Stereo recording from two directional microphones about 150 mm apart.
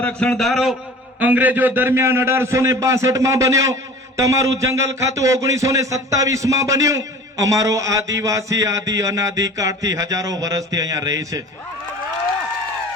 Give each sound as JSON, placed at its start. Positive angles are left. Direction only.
{"t": 0.0, "sound": "a man's voice", "side_deg": 5}
{"t": 1.2, "sound": "a man's voice", "side_deg": -10}